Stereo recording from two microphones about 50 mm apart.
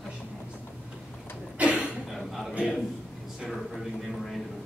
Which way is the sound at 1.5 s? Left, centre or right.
Right.